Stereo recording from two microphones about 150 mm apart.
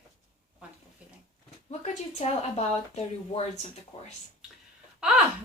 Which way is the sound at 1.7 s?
45° left (ahead or behind).